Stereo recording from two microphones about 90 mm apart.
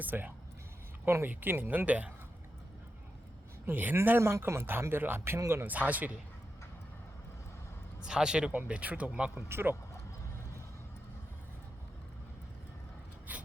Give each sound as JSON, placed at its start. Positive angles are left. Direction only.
{"t": 0.0, "sound": "speech", "side_deg": -20}
{"t": 3.7, "sound": "speech", "side_deg": -20}
{"t": 5.7, "sound": "speech", "side_deg": -15}
{"t": 8.0, "sound": "speech", "side_deg": -10}
{"t": 9.5, "sound": "speech", "side_deg": -25}
{"t": 13.3, "sound": "mechanisms", "side_deg": -20}